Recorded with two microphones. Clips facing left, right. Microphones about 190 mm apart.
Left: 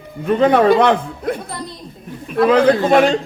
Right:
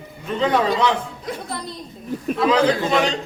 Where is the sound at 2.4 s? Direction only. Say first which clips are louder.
Left 6 dB; 55° left (ahead or behind).